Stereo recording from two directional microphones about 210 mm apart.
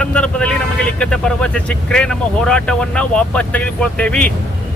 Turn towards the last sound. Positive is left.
turn(degrees=5)  # may be behind; listen again after turning